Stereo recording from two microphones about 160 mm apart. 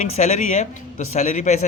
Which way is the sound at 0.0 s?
45° left (ahead or behind).